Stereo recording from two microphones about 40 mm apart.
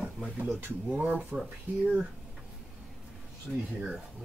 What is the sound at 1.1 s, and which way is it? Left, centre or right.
Speech, right.